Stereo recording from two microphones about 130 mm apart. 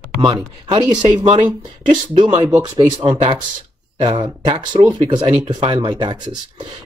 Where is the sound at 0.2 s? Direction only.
35° right (ahead or behind).